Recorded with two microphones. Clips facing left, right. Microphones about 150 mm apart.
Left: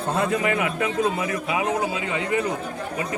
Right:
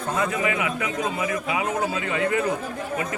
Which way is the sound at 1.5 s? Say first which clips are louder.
Left 3 dB; 25° left (ahead or behind).